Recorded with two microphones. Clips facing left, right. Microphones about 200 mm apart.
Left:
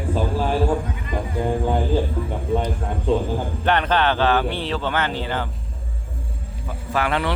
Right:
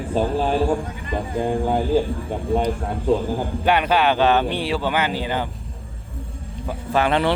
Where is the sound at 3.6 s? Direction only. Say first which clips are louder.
Right 1 dB; 10° right (ahead or behind).